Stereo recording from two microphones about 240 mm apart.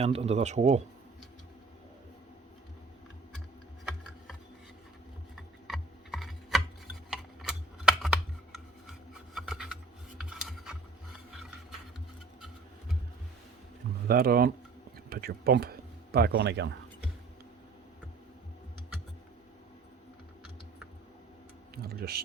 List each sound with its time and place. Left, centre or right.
0.0 s speech: right
5.6 s tick-tock: centre
14.1 s speech: right
21.8 s a sound: right